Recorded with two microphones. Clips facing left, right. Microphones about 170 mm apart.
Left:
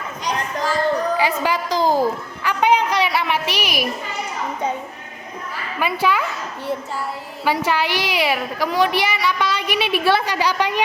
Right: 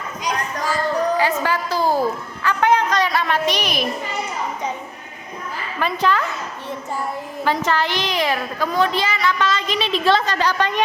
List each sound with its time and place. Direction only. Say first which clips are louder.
1.1 s a woman's voice: even; 15° left (ahead or behind)
5.8 s a woman's voice: even; 10° left (ahead or behind)
7.4 s a woman's voice: left 1 dB; 10° left (ahead or behind)